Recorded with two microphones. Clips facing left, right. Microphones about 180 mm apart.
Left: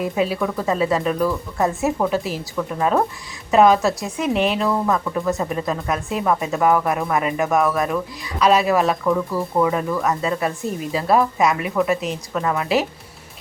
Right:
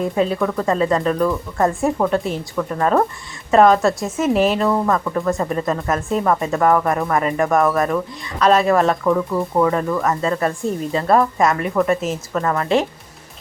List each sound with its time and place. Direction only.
0.0 s speech: 5° left (ahead or behind)
9.3 s speech: 20° right (ahead or behind)
9.6 s speech: 5° left (ahead or behind)